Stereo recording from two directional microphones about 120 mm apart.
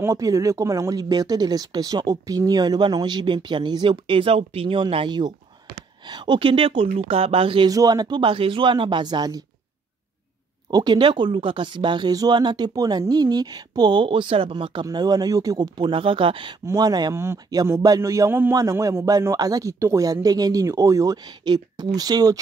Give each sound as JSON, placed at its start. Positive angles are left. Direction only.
{"t": 0.0, "sound": "speech", "side_deg": -25}
{"t": 7.7, "sound": "speech", "side_deg": -30}
{"t": 10.7, "sound": "speech", "side_deg": -35}
{"t": 16.6, "sound": "speech", "side_deg": -30}
{"t": 17.1, "sound": "a man's voice", "side_deg": -20}